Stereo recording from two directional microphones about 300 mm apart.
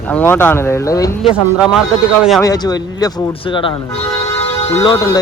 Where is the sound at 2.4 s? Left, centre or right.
Centre.